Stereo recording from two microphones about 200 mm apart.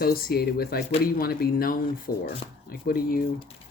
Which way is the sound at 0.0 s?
50° left (ahead or behind).